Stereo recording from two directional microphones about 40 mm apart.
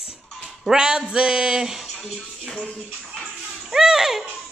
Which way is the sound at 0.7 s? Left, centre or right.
Right.